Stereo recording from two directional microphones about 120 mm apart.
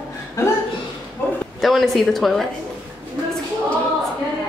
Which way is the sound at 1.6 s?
Centre (ahead or behind).